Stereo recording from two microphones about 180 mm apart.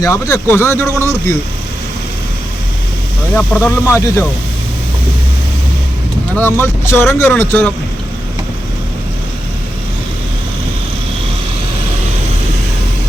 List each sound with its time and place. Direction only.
0.0 s speech: 15° left (ahead or behind)
3.6 s speech: 15° left (ahead or behind)
6.3 s speech: 10° left (ahead or behind)